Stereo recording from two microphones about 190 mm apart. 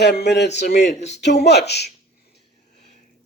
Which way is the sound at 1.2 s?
60° left (ahead or behind).